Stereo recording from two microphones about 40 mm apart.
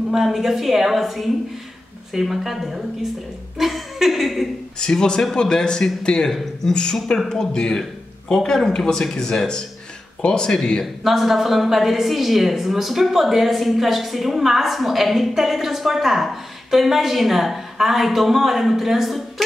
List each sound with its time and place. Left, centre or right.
0.1 s a woman's voice: centre
4.7 s speech: centre
11.1 s a woman's voice: centre